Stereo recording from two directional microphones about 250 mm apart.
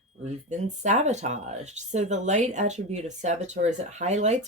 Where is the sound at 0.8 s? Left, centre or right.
Right.